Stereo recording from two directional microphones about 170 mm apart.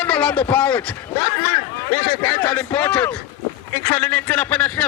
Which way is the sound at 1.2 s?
30° left (ahead or behind).